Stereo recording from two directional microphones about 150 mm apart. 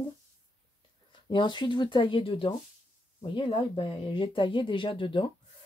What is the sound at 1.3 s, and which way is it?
Speech, 30° left (ahead or behind).